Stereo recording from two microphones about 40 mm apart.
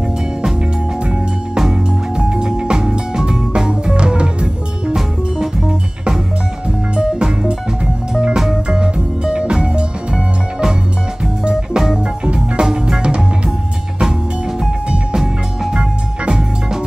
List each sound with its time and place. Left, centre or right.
1.7 s music: centre
7.0 s music: centre
8.6 s music: right
11.4 s music: centre
12.3 s music: right
15.7 s music: centre